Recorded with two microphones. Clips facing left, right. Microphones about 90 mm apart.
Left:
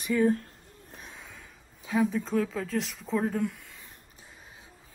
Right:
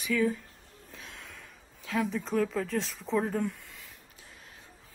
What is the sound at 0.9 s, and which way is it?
Snort, 15° left (ahead or behind).